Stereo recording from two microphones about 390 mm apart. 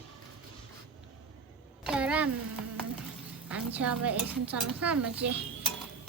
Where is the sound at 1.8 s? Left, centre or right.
Centre.